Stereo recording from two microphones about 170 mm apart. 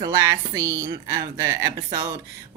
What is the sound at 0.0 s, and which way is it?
A woman's voice, 20° right (ahead or behind).